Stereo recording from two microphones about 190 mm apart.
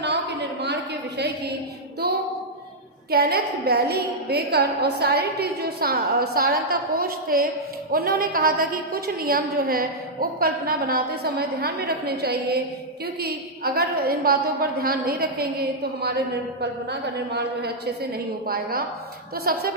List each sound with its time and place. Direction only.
0.0 s a sound: 60° right (ahead or behind)
3.1 s a woman's voice: 55° right (ahead or behind)
16.6 s a woman's voice: 60° right (ahead or behind)
18.4 s a woman's voice: 50° right (ahead or behind)